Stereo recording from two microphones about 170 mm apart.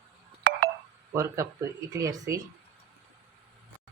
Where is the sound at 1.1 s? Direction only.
15° right (ahead or behind).